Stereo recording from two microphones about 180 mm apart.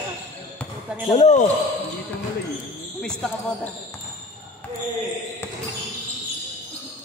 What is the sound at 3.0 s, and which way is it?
Speech, 5° left (ahead or behind).